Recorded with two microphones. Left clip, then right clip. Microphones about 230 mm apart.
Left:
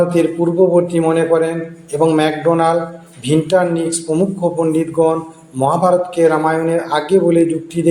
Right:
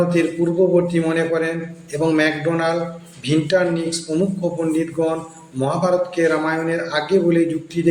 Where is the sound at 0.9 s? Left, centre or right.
Centre.